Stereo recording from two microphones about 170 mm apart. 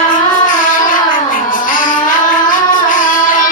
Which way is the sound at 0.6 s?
50° left (ahead or behind).